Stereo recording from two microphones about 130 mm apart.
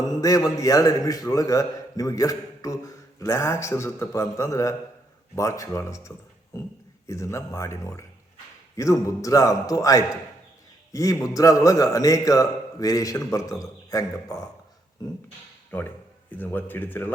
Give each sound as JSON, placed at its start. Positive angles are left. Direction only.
{"t": 0.0, "sound": "a man's voice", "side_deg": 30}
{"t": 16.4, "sound": "speech", "side_deg": 15}